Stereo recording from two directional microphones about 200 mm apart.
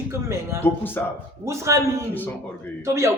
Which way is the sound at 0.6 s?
10° left (ahead or behind).